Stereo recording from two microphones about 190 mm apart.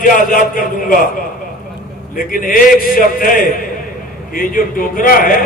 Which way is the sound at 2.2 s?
45° left (ahead or behind).